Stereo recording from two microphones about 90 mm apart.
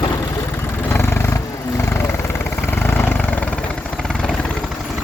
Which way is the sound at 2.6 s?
25° left (ahead or behind).